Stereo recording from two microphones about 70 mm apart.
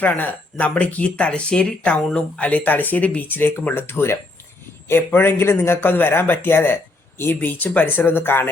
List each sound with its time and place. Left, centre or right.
0.0 s a man's voice: left
3.8 s a man's voice: left